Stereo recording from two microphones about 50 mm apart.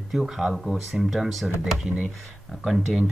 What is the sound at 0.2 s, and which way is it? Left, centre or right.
Speech, centre.